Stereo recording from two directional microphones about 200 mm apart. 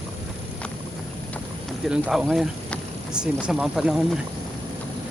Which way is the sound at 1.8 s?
Centre (ahead or behind).